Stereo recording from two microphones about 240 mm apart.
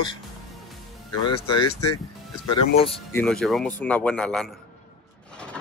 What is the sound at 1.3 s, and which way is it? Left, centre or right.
Speech, left.